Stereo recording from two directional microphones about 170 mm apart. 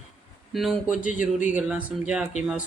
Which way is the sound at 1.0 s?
50° left (ahead or behind).